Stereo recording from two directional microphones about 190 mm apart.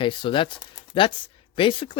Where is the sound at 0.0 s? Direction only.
25° left (ahead or behind).